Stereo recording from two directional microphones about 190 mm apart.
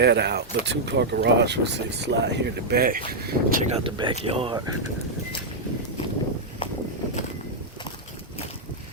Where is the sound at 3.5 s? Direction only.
35° right (ahead or behind).